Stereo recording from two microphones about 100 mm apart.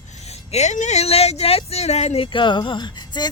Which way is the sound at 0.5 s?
90° left.